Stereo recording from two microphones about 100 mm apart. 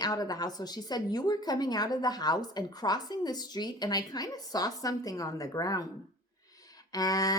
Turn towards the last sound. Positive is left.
turn(degrees=35)  # may be behind; listen again after turning